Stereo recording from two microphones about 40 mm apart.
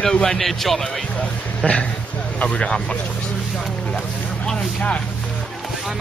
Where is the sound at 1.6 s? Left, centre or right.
Left.